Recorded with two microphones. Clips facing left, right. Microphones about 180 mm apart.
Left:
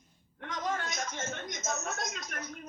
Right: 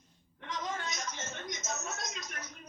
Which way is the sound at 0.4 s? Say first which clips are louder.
Left 3 dB; 55° left (ahead or behind).